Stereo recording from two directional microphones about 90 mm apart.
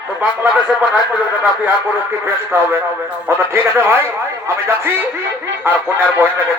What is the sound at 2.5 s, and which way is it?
A man's voice, 25° right (ahead or behind).